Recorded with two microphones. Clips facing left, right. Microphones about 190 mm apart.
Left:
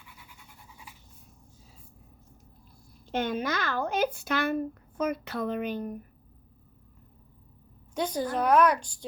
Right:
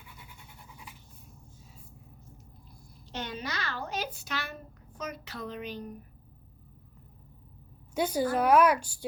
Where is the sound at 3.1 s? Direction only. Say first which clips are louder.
Left 8 dB; 55° left (ahead or behind).